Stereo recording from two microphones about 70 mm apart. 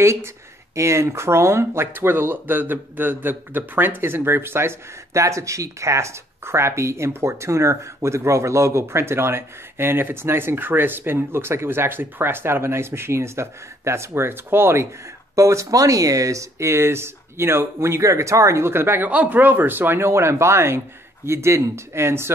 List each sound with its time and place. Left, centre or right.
0.0 s speech: right
15.3 s speech: right
19.0 s speech: right